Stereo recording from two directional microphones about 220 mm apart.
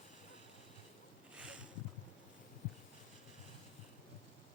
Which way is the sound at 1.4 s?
5° right (ahead or behind).